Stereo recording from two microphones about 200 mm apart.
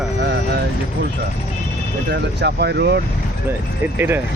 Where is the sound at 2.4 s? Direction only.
55° right (ahead or behind).